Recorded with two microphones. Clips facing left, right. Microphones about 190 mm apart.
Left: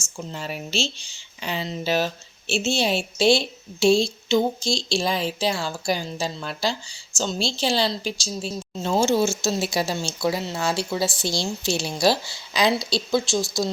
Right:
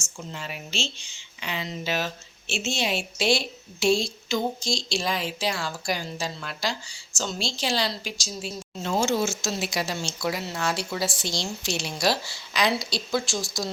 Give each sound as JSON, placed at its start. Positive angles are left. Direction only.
{"t": 0.3, "sound": "a woman's voice", "side_deg": 40}